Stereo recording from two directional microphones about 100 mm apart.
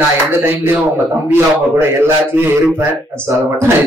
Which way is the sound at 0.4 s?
20° right (ahead or behind).